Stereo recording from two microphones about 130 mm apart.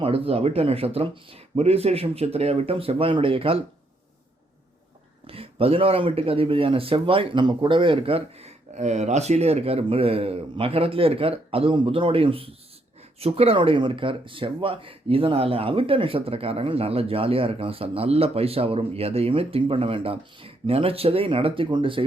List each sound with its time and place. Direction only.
0.0 s speech: 45° right (ahead or behind)
5.2 s speech: 45° right (ahead or behind)